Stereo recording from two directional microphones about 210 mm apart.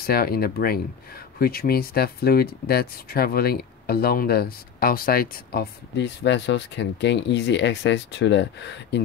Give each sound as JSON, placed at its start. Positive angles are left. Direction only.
{"t": 0.0, "sound": "speech", "side_deg": 45}